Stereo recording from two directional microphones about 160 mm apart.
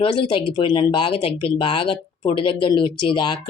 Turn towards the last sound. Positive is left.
turn(degrees=30)  # may be behind; listen again after turning